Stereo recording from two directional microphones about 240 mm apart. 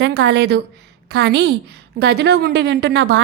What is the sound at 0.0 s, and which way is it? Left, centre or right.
A woman's voice, right.